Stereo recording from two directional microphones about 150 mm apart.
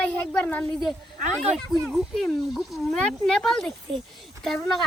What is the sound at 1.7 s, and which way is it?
Speech, centre (ahead or behind).